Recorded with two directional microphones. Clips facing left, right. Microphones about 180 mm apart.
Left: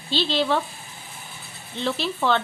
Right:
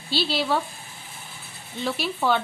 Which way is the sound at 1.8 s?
10° right (ahead or behind).